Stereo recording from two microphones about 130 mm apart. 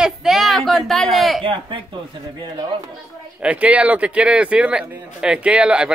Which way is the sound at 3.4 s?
10° right (ahead or behind).